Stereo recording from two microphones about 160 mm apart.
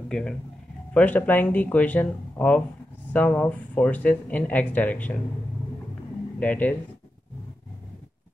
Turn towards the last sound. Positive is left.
turn(degrees=10)  # may be behind; listen again after turning